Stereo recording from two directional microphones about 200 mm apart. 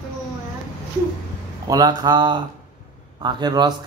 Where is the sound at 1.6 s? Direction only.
20° right (ahead or behind).